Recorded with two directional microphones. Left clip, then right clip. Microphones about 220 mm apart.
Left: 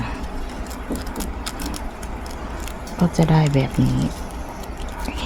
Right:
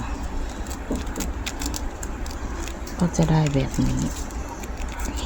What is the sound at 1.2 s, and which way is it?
Vehicle, 10° left (ahead or behind).